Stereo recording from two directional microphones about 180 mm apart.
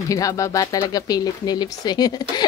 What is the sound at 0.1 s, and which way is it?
Speech, 20° left (ahead or behind).